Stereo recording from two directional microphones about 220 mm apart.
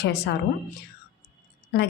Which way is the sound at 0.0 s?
45° left (ahead or behind).